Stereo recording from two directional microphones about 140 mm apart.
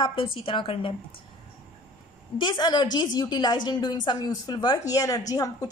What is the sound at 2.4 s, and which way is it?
A woman's voice, 35° left (ahead or behind).